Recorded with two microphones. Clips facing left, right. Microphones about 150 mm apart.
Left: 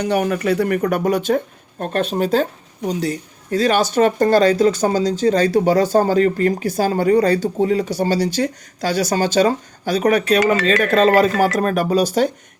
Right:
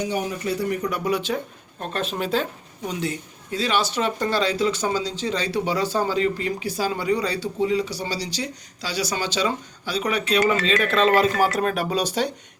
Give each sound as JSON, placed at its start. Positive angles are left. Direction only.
{"t": 0.0, "sound": "a woman's voice", "side_deg": 65}